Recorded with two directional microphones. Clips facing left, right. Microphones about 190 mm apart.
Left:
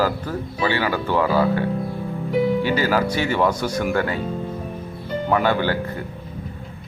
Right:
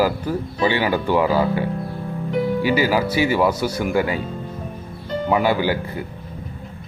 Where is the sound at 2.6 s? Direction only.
10° right (ahead or behind).